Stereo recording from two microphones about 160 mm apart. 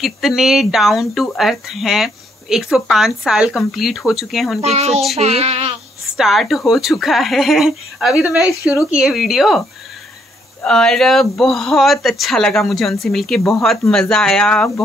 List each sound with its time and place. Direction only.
0.0 s speech: centre (ahead or behind)
4.6 s speech: 40° right (ahead or behind)
6.1 s speech: centre (ahead or behind)
10.6 s speech: 5° left (ahead or behind)